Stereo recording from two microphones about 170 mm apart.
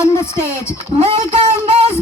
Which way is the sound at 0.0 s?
15° left (ahead or behind).